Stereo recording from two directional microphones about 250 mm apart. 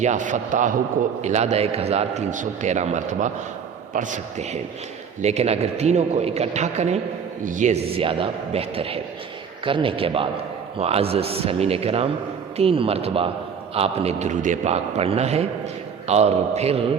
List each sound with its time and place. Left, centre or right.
0.0 s a man's voice: right